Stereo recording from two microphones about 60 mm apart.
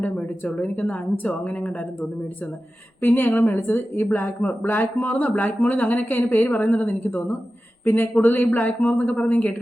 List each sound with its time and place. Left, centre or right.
0.0 s a woman's voice: left